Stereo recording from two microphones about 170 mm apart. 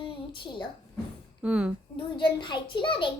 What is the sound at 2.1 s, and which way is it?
Speech, 30° left (ahead or behind).